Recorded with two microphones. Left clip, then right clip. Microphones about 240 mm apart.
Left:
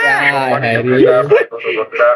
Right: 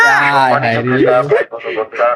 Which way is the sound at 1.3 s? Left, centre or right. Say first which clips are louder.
Left 2 dB; centre.